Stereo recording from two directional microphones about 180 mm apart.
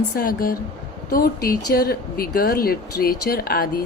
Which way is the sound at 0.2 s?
55° left (ahead or behind).